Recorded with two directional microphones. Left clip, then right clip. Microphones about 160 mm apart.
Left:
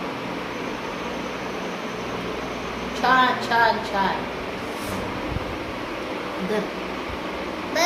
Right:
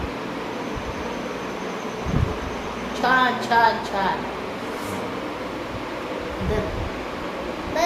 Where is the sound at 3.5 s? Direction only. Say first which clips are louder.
Right 3 dB; 20° right (ahead or behind).